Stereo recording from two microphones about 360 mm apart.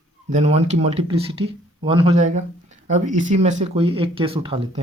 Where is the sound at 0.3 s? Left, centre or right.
Centre.